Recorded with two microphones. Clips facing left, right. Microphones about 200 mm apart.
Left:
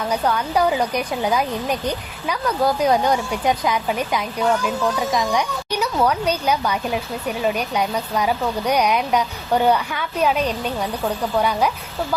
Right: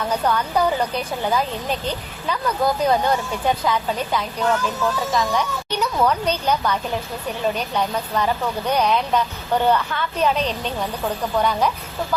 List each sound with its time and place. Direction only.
0.1 s speech: 10° left (ahead or behind)